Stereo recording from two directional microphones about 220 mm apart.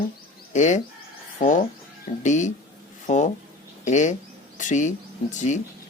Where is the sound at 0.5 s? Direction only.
35° left (ahead or behind).